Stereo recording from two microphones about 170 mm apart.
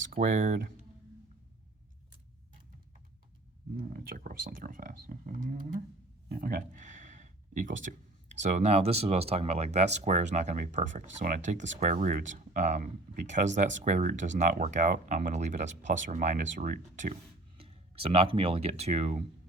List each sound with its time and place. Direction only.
0.3 s speech: 55° right (ahead or behind)
3.8 s speech: 60° right (ahead or behind)
17.6 s speech: 35° right (ahead or behind)